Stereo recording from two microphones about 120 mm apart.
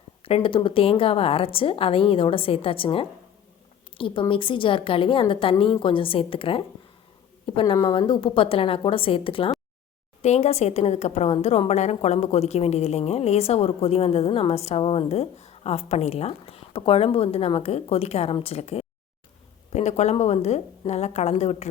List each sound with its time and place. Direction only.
0.2 s a woman's voice: 50° left (ahead or behind)
10.2 s a woman's voice: 65° left (ahead or behind)
19.7 s a woman's voice: 70° left (ahead or behind)